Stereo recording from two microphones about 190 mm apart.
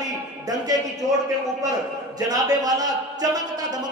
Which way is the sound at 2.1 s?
20° right (ahead or behind).